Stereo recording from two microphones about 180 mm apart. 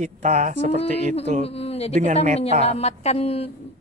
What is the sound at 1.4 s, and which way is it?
Speech, 35° left (ahead or behind).